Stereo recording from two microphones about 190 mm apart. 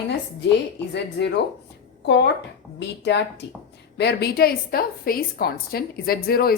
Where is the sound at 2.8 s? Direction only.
65° left (ahead or behind).